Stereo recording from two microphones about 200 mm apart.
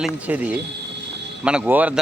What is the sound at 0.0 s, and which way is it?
Speech, 5° right (ahead or behind).